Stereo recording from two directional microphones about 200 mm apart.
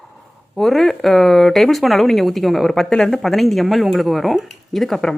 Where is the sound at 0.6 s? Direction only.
Centre (ahead or behind).